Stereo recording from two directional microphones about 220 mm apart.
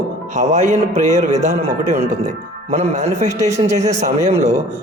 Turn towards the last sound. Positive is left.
turn(degrees=-30)  # may be behind; listen again after turning